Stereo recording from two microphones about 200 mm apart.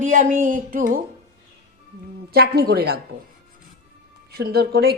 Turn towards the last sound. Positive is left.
turn(degrees=-50)  # may be behind; listen again after turning